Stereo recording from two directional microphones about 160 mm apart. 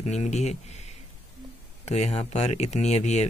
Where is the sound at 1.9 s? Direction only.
45° left (ahead or behind).